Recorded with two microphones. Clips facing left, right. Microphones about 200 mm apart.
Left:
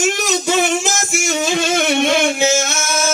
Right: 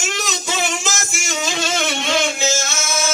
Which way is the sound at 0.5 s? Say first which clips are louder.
Left 7 dB; 55° left (ahead or behind).